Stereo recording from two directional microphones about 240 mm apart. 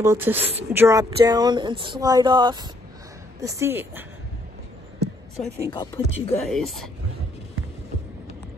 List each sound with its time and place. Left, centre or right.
0.0 s speech: centre
5.7 s speech: centre
6.5 s speech: centre